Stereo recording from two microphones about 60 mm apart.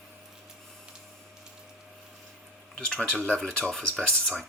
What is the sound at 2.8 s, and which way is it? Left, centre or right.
Speech, left.